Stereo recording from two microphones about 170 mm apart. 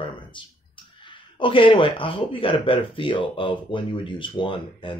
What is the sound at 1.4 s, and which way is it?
Speech, 30° left (ahead or behind).